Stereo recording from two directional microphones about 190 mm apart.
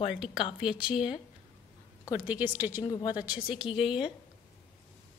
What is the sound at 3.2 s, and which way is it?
Speech, 5° right (ahead or behind).